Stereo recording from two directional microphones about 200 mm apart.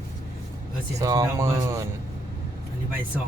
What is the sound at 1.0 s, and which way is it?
Speech, 15° right (ahead or behind).